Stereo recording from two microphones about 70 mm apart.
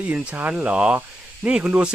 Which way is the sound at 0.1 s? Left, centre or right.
Right.